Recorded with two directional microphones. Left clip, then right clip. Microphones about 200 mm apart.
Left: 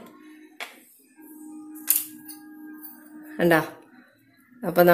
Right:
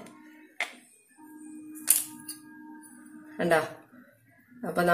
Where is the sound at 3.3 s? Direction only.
35° left (ahead or behind).